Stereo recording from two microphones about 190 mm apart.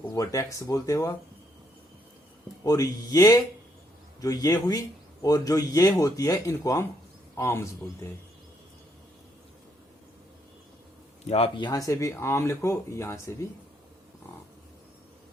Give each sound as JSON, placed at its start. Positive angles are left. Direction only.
{"t": 0.0, "sound": "speech", "side_deg": 15}
{"t": 2.6, "sound": "speech", "side_deg": 20}
{"t": 11.3, "sound": "speech", "side_deg": 30}